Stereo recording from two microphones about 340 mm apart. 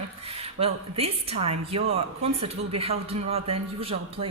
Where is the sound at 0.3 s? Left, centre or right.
Centre.